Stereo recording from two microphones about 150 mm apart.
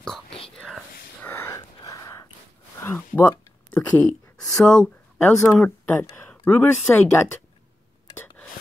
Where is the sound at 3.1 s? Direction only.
10° left (ahead or behind).